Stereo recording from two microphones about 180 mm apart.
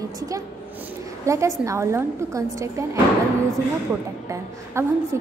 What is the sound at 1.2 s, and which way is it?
A woman's voice, 15° right (ahead or behind).